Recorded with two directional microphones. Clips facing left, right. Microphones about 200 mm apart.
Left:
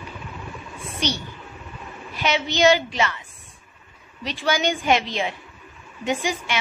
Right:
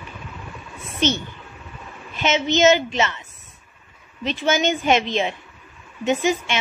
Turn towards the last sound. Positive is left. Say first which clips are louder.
# right 5 dB
turn(degrees=-25)  # may be behind; listen again after turning